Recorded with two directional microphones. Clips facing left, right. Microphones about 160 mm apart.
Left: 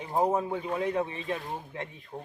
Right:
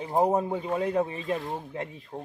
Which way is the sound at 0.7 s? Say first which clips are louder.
Right 3 dB; 35° right (ahead or behind).